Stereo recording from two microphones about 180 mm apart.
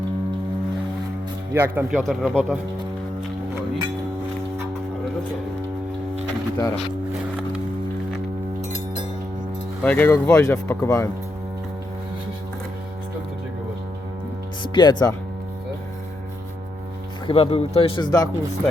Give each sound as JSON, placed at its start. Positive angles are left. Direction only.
{"t": 1.5, "sound": "speech", "side_deg": -10}
{"t": 2.0, "sound": "speech", "side_deg": 0}
{"t": 2.3, "sound": "speech", "side_deg": -10}
{"t": 6.6, "sound": "speech", "side_deg": 20}
{"t": 9.8, "sound": "speech", "side_deg": 10}
{"t": 14.6, "sound": "speech", "side_deg": 25}
{"t": 17.2, "sound": "speech", "side_deg": 30}